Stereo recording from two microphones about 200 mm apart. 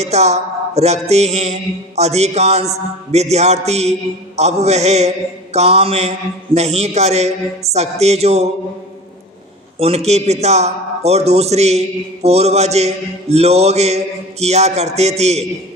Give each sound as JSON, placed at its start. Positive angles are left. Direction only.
{"t": 0.0, "sound": "mantra", "side_deg": -35}
{"t": 9.7, "sound": "mantra", "side_deg": -30}